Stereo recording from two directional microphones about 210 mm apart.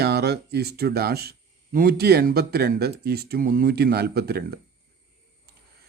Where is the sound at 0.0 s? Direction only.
50° right (ahead or behind).